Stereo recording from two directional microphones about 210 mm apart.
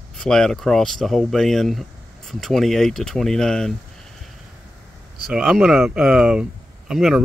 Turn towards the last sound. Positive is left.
turn(degrees=0)  # may be behind; listen again after turning